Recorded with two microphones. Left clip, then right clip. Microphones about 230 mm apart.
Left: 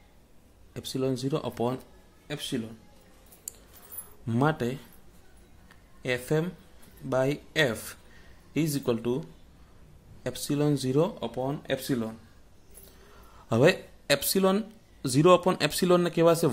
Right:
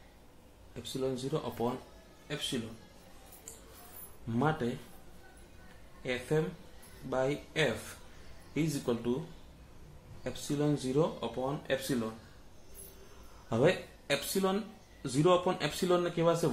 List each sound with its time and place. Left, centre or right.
0.9 s speech: left
4.3 s speech: left
6.0 s speech: left
10.2 s speech: left
13.5 s speech: left